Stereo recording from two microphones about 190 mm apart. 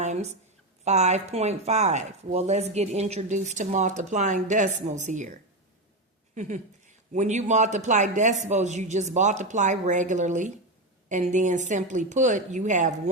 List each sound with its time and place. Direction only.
0.0 s a woman's voice: 35° right (ahead or behind)